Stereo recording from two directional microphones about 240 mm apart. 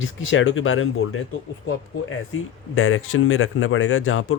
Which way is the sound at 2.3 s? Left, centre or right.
Left.